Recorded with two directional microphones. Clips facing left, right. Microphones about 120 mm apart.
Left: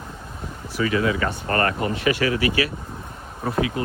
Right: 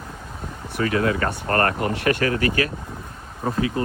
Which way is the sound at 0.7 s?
55° right (ahead or behind).